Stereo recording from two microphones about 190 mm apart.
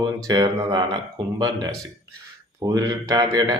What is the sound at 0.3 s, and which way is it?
Speech, 20° right (ahead or behind).